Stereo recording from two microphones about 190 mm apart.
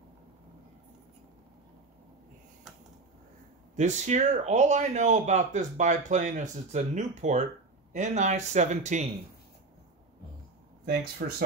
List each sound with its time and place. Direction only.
3.7 s a man's voice: 40° right (ahead or behind)
10.9 s speech: 55° right (ahead or behind)